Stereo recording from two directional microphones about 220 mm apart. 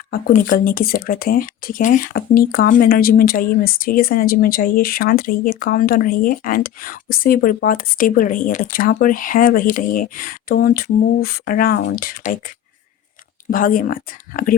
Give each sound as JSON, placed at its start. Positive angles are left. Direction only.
{"t": 0.1, "sound": "speech", "side_deg": 40}
{"t": 13.5, "sound": "speech", "side_deg": 40}